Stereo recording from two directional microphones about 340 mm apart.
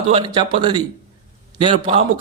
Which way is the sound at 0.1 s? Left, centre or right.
Centre.